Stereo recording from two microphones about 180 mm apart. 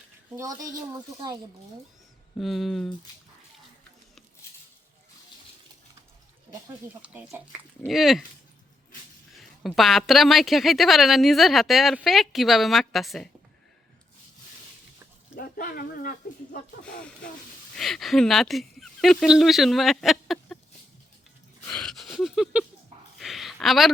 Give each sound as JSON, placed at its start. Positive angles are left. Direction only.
{"t": 0.3, "sound": "speech", "side_deg": -20}
{"t": 2.4, "sound": "speech", "side_deg": 0}
{"t": 7.0, "sound": "speech", "side_deg": -10}
{"t": 7.8, "sound": "speech", "side_deg": 0}
{"t": 9.4, "sound": "speech", "side_deg": 0}
{"t": 15.4, "sound": "speech", "side_deg": 50}
{"t": 17.7, "sound": "speech", "side_deg": 0}
{"t": 21.7, "sound": "a sound", "side_deg": 5}